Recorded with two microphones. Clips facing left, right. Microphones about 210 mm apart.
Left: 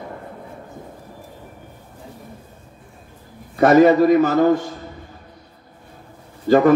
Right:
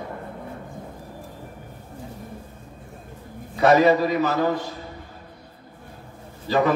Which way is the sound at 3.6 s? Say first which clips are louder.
Left 5 dB; 50° left (ahead or behind).